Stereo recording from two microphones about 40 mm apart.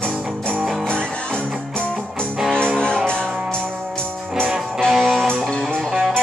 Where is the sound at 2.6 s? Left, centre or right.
Left.